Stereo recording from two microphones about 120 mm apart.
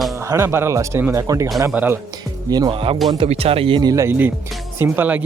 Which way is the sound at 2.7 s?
50° right (ahead or behind).